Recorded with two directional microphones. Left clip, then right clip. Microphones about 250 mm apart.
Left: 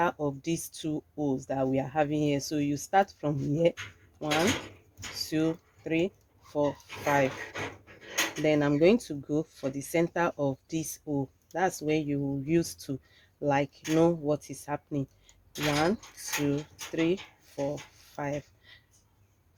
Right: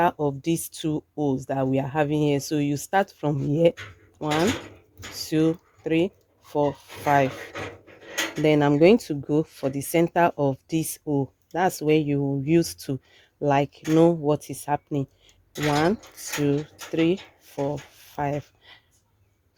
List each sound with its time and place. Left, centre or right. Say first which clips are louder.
0.0 s speech: right 6 dB; right
5.1 s speech: right 6 dB; right
8.4 s speech: right 7 dB; right